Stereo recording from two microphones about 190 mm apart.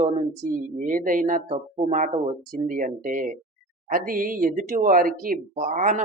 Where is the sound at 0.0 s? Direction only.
35° right (ahead or behind).